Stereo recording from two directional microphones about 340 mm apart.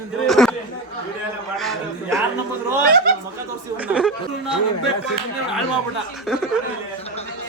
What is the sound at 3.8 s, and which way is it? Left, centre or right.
Speech, centre.